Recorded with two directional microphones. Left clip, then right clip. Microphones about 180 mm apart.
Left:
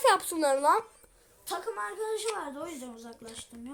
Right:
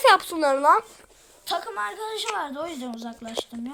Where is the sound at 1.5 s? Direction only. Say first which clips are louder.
Right 6 dB; 30° right (ahead or behind).